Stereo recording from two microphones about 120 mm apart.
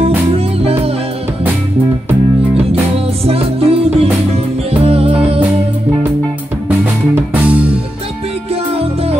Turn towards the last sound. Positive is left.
turn(degrees=-15)  # may be behind; listen again after turning